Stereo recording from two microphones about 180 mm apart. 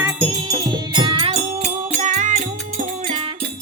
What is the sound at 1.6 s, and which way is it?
Music, 45° right (ahead or behind).